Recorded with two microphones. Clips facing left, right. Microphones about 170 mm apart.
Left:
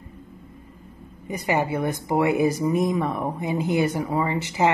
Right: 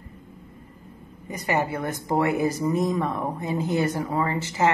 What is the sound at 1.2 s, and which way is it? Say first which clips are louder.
Speech: left 2 dB; 15° left (ahead or behind).